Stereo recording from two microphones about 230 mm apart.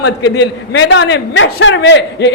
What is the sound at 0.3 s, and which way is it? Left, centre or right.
A man's voice, left.